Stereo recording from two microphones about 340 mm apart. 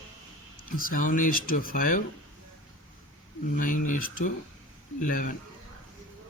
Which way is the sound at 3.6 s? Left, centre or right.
Left.